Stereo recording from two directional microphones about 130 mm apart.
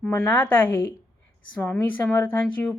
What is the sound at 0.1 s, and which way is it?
A woman's voice, 15° left (ahead or behind).